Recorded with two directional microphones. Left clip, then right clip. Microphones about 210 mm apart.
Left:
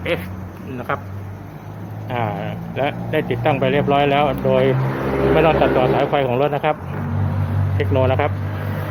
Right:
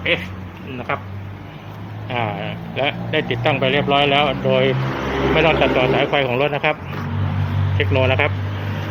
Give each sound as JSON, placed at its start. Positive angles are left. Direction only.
{"t": 0.0, "sound": "speech", "side_deg": 0}
{"t": 2.0, "sound": "speech", "side_deg": 0}
{"t": 7.8, "sound": "speech", "side_deg": 0}